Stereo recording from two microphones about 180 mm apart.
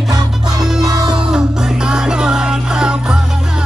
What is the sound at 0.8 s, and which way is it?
Music, 20° right (ahead or behind).